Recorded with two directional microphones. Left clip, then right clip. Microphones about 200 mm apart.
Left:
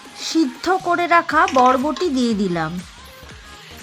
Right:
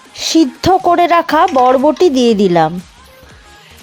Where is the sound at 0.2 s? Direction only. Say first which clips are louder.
Right 8 dB; 25° right (ahead or behind).